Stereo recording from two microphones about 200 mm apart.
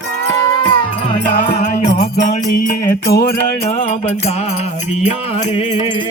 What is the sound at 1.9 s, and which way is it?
Music, 50° left (ahead or behind).